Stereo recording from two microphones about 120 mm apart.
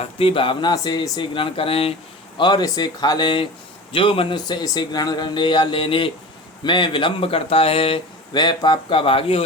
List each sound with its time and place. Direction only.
0.0 s speech: 50° left (ahead or behind)
2.4 s speech: 35° left (ahead or behind)
8.4 s speech: 35° left (ahead or behind)